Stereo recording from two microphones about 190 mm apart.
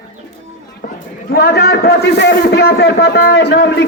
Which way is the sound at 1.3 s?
60° left (ahead or behind).